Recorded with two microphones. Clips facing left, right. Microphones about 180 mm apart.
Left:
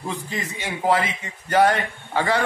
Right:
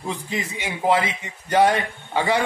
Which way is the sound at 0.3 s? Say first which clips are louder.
Right 1 dB; 15° right (ahead or behind).